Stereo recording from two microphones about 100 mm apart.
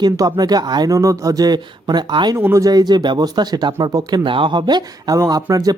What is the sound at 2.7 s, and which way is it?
Speech, 45° right (ahead or behind).